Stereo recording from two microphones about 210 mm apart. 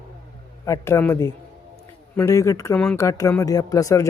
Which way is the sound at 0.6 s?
15° left (ahead or behind).